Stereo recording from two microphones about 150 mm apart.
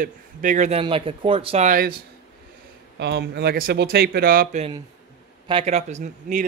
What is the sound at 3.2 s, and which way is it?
A man's voice, 90° right.